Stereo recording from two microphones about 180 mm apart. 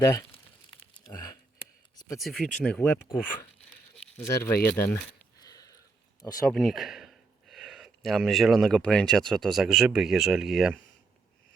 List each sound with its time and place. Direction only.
0.0 s speech: 15° left (ahead or behind)
2.1 s speech: centre (ahead or behind)
4.2 s speech: 10° left (ahead or behind)
5.4 s sniff: 20° left (ahead or behind)
6.5 s speech: centre (ahead or behind)